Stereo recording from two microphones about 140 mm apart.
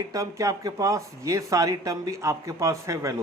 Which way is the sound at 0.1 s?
25° right (ahead or behind).